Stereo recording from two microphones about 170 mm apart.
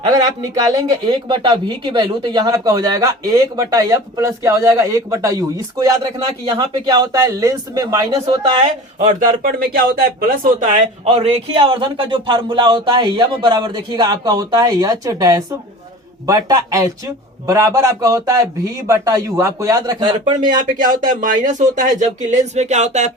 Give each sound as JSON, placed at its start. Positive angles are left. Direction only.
{"t": 0.4, "sound": "speech", "side_deg": -20}
{"t": 8.3, "sound": "speech", "side_deg": -35}
{"t": 9.4, "sound": "a man's voice", "side_deg": -55}
{"t": 20.7, "sound": "speech", "side_deg": -50}